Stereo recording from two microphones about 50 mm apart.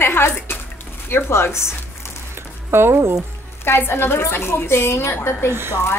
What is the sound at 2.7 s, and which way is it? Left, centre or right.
Speech, right.